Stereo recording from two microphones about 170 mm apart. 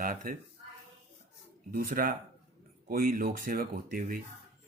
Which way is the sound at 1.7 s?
55° right (ahead or behind).